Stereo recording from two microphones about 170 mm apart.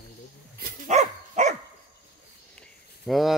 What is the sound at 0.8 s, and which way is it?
Dog, 45° right (ahead or behind).